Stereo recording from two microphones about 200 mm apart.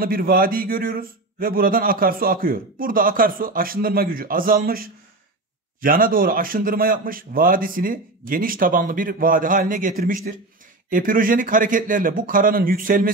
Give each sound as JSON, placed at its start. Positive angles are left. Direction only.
{"t": 0.0, "sound": "a man's voice", "side_deg": -45}